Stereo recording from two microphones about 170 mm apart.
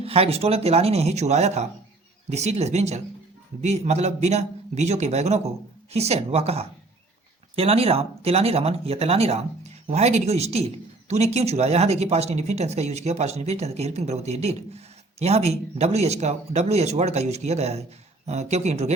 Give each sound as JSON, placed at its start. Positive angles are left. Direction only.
{"t": 0.0, "sound": "speech", "side_deg": -35}